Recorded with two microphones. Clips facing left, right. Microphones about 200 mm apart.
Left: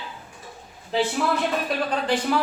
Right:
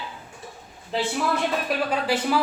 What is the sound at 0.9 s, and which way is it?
Speech, centre (ahead or behind).